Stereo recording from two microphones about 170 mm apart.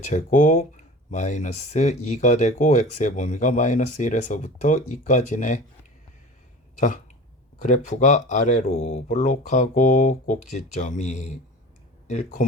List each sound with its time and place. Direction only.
0.0 s speech: 45° left (ahead or behind)
6.7 s speech: 50° left (ahead or behind)